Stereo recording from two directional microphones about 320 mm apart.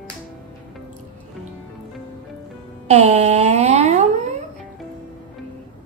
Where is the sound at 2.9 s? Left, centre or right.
Right.